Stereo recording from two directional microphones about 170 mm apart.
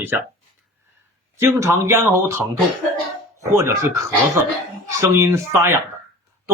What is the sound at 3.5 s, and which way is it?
Speech, 15° right (ahead or behind).